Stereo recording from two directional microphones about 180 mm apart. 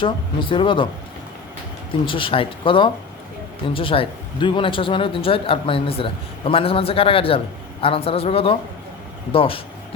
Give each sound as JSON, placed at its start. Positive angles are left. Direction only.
{"t": 0.0, "sound": "speech", "side_deg": 30}
{"t": 2.0, "sound": "a man's voice", "side_deg": 30}